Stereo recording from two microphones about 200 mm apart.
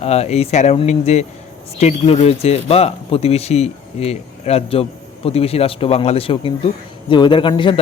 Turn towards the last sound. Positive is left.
turn(degrees=25)  # may be behind; listen again after turning